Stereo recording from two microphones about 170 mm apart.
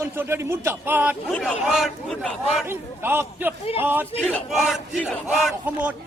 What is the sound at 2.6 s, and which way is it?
Speech, 15° right (ahead or behind).